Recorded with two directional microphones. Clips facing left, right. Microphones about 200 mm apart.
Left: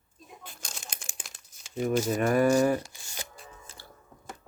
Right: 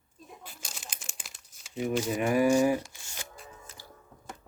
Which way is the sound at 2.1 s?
10° right (ahead or behind).